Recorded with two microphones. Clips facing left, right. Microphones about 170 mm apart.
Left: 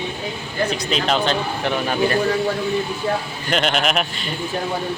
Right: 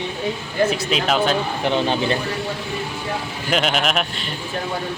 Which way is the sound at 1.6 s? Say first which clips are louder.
Even; 25° right (ahead or behind).